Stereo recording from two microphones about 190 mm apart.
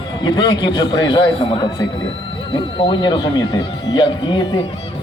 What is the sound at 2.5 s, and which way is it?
Speech, 25° left (ahead or behind).